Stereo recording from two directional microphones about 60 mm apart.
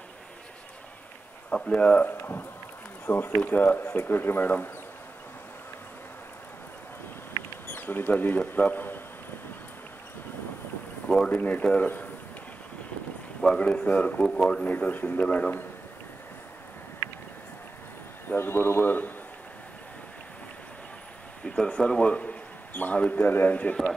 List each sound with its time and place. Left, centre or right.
1.5 s speech: centre
2.0 s speech: left
7.6 s speech: left
11.1 s speech: centre
11.3 s speech: left
13.4 s speech: centre
18.3 s speech: left
21.5 s speech: centre